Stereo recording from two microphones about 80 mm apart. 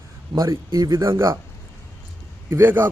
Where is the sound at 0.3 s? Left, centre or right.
Right.